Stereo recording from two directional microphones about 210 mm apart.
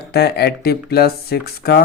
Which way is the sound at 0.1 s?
50° left (ahead or behind).